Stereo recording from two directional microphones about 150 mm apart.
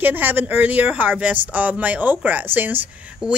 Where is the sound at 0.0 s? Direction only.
10° right (ahead or behind).